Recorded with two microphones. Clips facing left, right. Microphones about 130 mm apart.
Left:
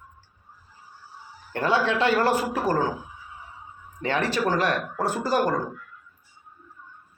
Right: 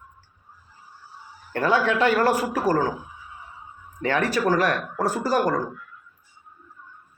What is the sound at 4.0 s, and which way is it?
A man's voice, 25° left (ahead or behind).